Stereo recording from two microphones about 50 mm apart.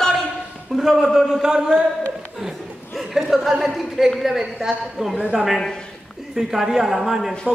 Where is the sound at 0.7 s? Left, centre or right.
Centre.